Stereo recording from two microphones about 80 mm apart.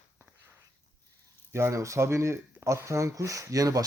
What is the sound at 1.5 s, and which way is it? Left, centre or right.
Speech, right.